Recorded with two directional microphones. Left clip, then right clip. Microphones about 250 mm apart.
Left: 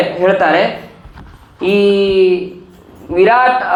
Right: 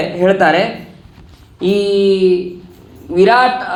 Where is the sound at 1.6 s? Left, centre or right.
Right.